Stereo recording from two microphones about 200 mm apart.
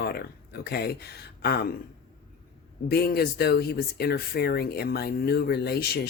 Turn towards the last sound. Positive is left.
turn(degrees=50)  # may be behind; listen again after turning